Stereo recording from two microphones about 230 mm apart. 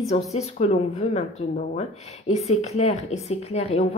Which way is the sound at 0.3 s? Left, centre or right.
Left.